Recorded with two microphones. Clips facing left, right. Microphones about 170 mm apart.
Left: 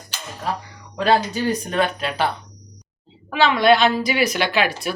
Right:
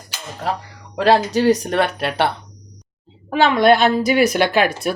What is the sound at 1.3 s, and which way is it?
Speech, 80° right.